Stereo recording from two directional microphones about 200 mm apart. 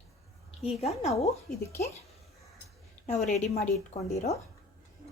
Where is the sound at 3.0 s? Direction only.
35° left (ahead or behind).